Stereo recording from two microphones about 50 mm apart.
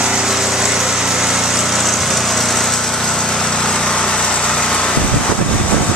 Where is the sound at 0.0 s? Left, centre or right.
Centre.